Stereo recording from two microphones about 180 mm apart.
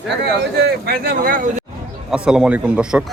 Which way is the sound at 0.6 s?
60° right (ahead or behind).